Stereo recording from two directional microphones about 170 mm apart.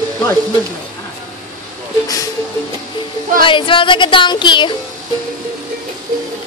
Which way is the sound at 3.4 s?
30° left (ahead or behind).